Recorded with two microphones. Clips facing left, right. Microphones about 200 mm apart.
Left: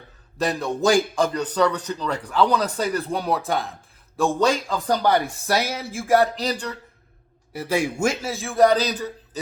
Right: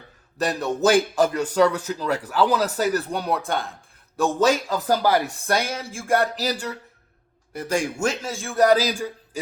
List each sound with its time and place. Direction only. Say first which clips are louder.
0.3 s a man's voice: even; centre (ahead or behind)
7.5 s a man's voice: left 1 dB; 5° left (ahead or behind); by 9.4 s 10° right (ahead or behind)